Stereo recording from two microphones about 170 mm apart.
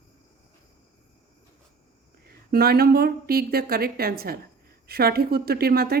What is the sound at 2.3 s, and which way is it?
A woman's voice, 65° right (ahead or behind).